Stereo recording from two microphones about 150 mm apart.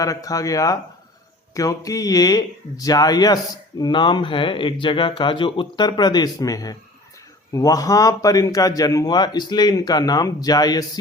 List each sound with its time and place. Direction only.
0.0 s speech: 25° left (ahead or behind)